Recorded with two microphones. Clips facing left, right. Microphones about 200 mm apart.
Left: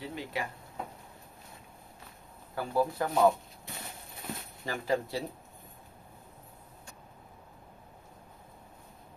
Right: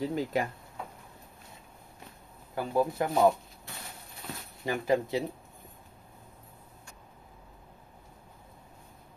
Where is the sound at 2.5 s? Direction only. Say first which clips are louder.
Right 2 dB; 15° right (ahead or behind).